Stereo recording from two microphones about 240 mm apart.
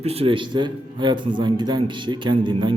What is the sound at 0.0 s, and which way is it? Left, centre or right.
A man's voice, right.